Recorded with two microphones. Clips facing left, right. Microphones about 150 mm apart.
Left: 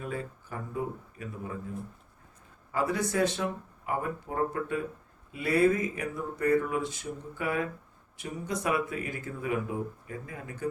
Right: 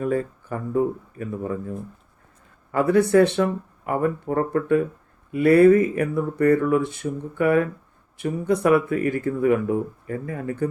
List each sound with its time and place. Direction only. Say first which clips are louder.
0.0 s speech: right 12 dB; 50° right (ahead or behind)
2.7 s speech: right 12 dB; 60° right (ahead or behind)